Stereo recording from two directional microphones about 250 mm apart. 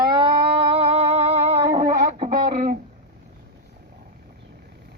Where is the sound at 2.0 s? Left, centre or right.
Right.